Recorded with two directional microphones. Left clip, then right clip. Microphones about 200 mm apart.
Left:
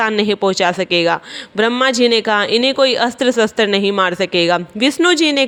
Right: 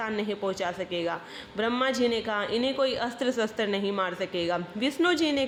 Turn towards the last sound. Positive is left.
turn(degrees=45)  # may be behind; listen again after turning